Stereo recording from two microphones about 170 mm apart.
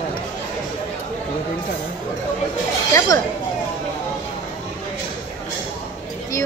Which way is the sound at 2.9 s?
20° left (ahead or behind).